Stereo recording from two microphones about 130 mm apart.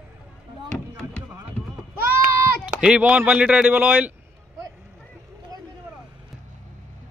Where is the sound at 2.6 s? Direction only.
10° right (ahead or behind).